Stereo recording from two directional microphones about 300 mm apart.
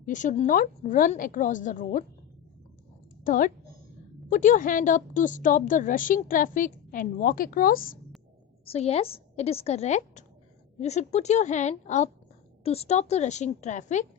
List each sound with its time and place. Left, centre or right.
0.0 s a woman's voice: left
3.2 s a woman's voice: left